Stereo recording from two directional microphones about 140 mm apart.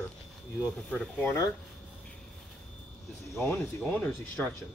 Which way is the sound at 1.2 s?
20° left (ahead or behind).